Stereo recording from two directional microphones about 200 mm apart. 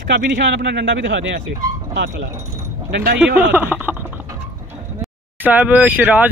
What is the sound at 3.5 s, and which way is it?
Speech, 10° right (ahead or behind).